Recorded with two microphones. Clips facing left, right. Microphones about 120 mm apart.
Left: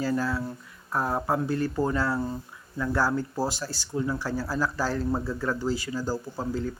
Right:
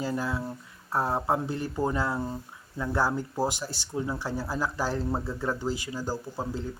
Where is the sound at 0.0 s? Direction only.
20° right (ahead or behind).